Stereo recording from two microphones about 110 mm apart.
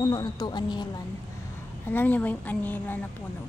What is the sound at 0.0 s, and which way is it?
Speech, 35° left (ahead or behind).